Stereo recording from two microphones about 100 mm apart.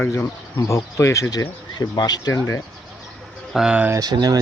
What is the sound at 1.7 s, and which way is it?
Speech, 40° left (ahead or behind).